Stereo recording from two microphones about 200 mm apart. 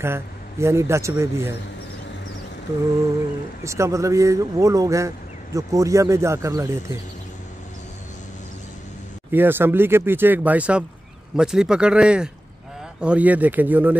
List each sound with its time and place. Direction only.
0.0 s speech: 10° right (ahead or behind)
3.6 s speech: 15° right (ahead or behind)
9.3 s speech: 10° right (ahead or behind)